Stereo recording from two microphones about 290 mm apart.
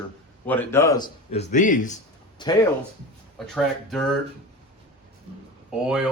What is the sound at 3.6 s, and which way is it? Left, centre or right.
Speech, centre.